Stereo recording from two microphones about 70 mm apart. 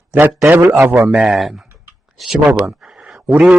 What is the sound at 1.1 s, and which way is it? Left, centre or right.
Speech, centre.